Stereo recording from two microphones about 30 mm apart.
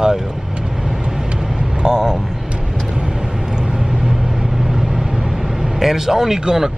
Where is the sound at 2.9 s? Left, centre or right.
Right.